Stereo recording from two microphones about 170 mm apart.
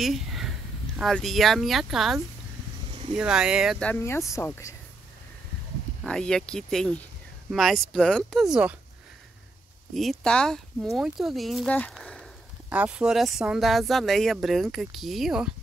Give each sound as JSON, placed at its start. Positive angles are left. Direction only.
{"t": 0.0, "sound": "speech", "side_deg": 0}
{"t": 3.2, "sound": "speech", "side_deg": -5}
{"t": 3.8, "sound": "speech", "side_deg": 10}
{"t": 6.0, "sound": "speech", "side_deg": 5}
{"t": 9.9, "sound": "speech", "side_deg": 0}
{"t": 12.6, "sound": "speech", "side_deg": -10}